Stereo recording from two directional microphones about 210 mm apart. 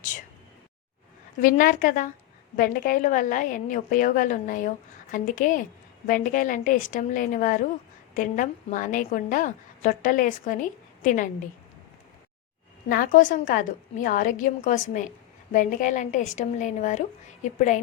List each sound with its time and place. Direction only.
1.4 s a woman's voice: 40° left (ahead or behind)
12.9 s a woman's voice: 40° left (ahead or behind)